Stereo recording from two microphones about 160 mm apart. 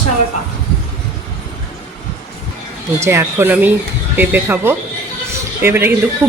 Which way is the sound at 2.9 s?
15° right (ahead or behind).